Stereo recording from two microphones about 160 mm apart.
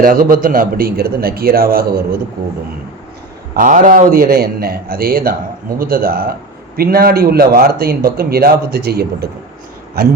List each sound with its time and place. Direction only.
0.0 s a man's voice: 60° right (ahead or behind)
3.5 s a man's voice: 55° right (ahead or behind); by 10.1 s 75° right (ahead or behind)